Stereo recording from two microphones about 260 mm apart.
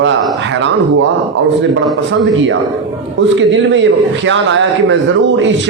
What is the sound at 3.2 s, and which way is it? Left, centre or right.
Speech, right.